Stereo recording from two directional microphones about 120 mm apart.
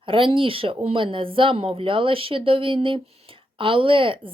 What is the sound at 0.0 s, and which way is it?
A woman's voice, 45° right (ahead or behind).